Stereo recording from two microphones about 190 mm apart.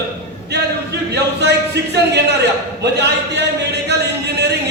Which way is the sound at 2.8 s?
65° right (ahead or behind).